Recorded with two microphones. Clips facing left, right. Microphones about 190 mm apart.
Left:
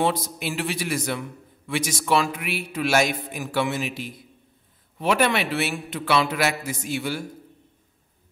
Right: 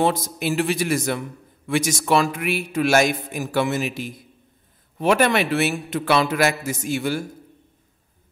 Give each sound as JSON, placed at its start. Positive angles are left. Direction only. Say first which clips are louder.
{"t": 0.0, "sound": "a man's voice", "louder": "right 3 dB", "side_deg": -45}